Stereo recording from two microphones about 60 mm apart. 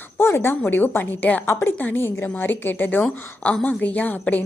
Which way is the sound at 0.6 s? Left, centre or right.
Left.